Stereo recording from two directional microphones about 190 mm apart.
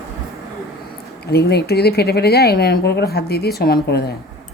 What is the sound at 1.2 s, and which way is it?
Speech, 60° left (ahead or behind).